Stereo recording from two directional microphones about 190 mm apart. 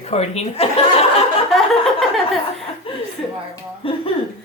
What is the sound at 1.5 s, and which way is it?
Laughter, centre (ahead or behind).